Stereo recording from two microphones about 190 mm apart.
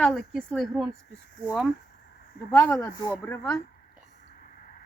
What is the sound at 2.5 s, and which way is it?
Speech, 10° left (ahead or behind).